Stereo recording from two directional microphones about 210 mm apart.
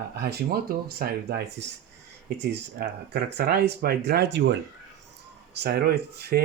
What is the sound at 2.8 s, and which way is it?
Speech, 50° right (ahead or behind).